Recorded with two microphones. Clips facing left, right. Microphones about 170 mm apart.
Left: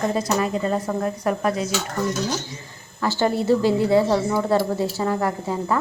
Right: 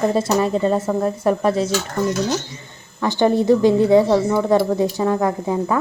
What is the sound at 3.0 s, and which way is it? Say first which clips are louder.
A woman's voice: right 5 dB; 20° right (ahead or behind).